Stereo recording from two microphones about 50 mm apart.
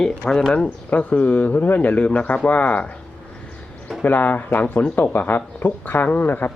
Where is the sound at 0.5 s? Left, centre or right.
Left.